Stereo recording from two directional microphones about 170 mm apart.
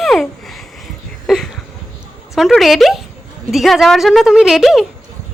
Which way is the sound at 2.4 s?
Centre (ahead or behind).